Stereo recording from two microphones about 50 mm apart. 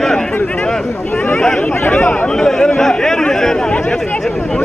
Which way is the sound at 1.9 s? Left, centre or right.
Left.